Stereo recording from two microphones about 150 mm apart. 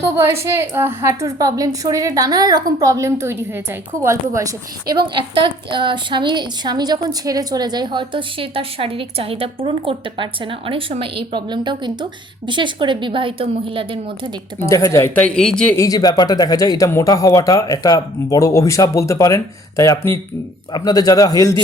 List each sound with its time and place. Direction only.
0.0 s a woman's voice: 20° right (ahead or behind); by 14.0 s 35° right (ahead or behind)
14.7 s speech: 20° left (ahead or behind); by 15.6 s 5° left (ahead or behind)
15.7 s speech: 20° left (ahead or behind)